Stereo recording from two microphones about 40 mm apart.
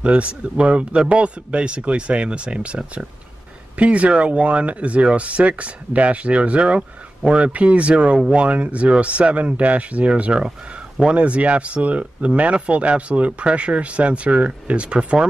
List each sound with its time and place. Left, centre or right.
0.0 s a man's voice: right